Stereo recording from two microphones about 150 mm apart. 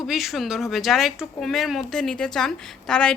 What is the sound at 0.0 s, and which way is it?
Speech, centre (ahead or behind).